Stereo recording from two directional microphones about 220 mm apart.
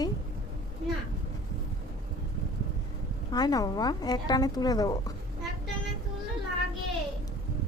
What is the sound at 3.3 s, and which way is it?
Speech, 15° left (ahead or behind).